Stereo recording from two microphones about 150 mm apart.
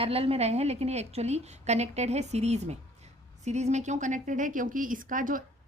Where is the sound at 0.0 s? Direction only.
40° right (ahead or behind).